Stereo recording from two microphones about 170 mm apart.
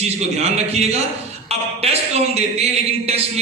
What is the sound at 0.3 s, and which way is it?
A man's voice, 40° right (ahead or behind).